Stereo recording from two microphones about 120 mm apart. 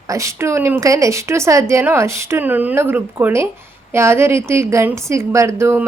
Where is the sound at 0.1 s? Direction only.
25° right (ahead or behind).